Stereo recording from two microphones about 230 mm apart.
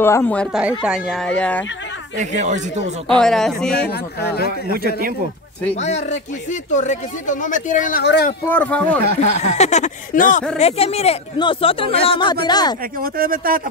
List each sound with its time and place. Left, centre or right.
0.0 s speech: centre
2.1 s speech: right
3.2 s speech: centre
5.8 s speech: left
8.0 s speech: left
8.5 s speech: centre
9.4 s speech: left
13.0 s speech: right